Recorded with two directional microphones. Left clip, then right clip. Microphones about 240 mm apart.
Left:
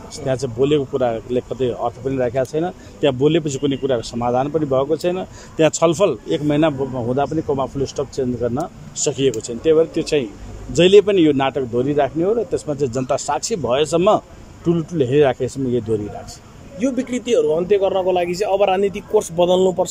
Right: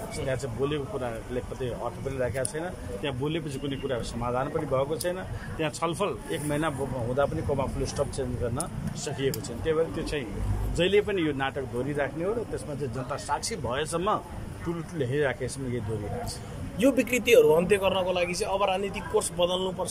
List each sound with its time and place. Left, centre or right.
0.3 s a man's voice: left
16.8 s a man's voice: centre; by 19.9 s left